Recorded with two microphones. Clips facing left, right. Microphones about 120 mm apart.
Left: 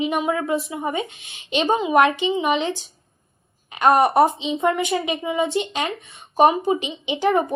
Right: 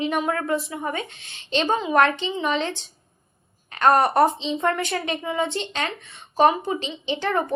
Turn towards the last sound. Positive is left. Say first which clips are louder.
# left 4 dB
turn(degrees=10)  # may be behind; listen again after turning